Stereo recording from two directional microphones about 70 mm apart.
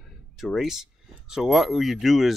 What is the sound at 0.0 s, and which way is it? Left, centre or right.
Speech, centre.